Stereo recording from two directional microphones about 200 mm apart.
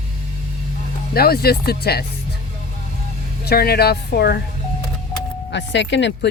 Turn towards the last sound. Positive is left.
turn(degrees=60)  # may be behind; listen again after turning